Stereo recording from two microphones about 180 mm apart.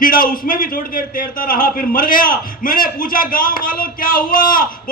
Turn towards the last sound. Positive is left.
turn(degrees=50)  # may be behind; listen again after turning